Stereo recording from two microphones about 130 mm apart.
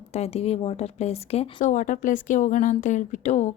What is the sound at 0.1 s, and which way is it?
A woman's voice, 55° left (ahead or behind).